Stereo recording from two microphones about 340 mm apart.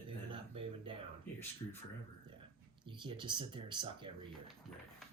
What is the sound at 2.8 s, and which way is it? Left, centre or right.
Speech, centre.